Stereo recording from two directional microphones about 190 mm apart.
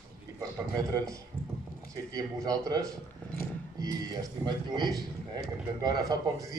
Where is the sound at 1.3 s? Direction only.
10° left (ahead or behind).